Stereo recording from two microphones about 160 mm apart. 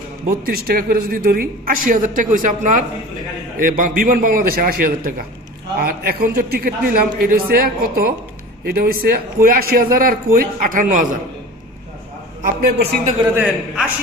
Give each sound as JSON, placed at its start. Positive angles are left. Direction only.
{"t": 0.4, "sound": "a man's voice", "side_deg": -65}
{"t": 12.4, "sound": "a man's voice", "side_deg": -70}
{"t": 13.3, "sound": "a man's voice", "side_deg": -10}